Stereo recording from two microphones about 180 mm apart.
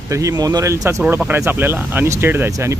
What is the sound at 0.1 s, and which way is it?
Speech, 20° right (ahead or behind).